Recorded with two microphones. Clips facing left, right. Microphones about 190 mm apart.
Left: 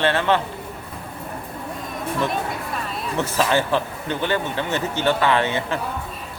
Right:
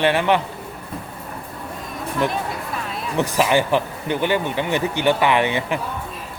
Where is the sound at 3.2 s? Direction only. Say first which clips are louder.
Right 3 dB; 15° right (ahead or behind).